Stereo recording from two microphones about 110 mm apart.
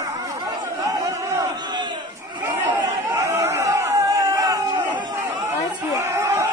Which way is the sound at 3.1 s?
30° right (ahead or behind).